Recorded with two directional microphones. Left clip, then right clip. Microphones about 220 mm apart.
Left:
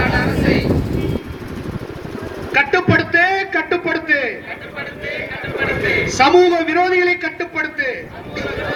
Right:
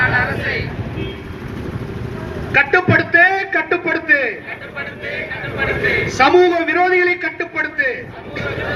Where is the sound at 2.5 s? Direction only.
60° left (ahead or behind).